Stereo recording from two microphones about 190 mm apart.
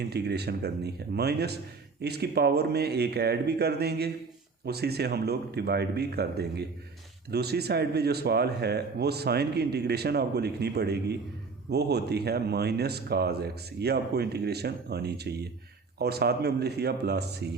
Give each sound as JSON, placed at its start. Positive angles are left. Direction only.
{"t": 0.0, "sound": "speech", "side_deg": -60}